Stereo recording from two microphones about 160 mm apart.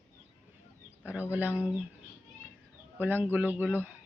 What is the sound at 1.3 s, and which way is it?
Speech, 10° right (ahead or behind).